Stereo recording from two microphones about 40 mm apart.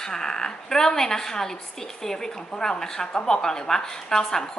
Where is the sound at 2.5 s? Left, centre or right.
Centre.